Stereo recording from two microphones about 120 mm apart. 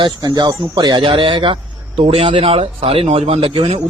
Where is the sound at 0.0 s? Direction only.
40° right (ahead or behind).